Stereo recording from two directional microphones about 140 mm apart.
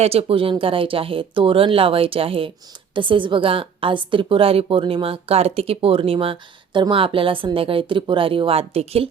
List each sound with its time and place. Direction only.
0.0 s a woman's voice: 45° right (ahead or behind)